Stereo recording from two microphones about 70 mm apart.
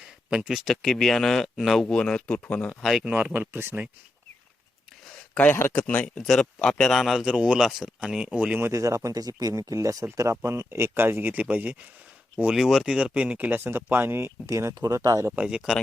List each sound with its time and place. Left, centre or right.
0.0 s a man's voice: centre
1.9 s speech: centre
3.0 s speech: right
3.4 s speech: right
5.3 s speech: centre
6.1 s a man's voice: centre
7.3 s speech: centre
8.2 s speech: centre
8.7 s speech: right
9.0 s speech: right
12.5 s speech: centre
13.1 s speech: centre; by 15.3 s right
15.3 s speech: centre